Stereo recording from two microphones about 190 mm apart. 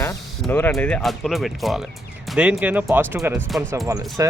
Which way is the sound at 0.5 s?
10° left (ahead or behind).